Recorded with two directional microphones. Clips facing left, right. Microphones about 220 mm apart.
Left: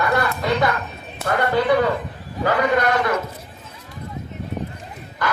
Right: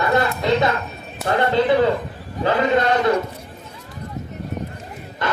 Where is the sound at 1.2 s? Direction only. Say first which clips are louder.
Right 1 dB; 25° right (ahead or behind).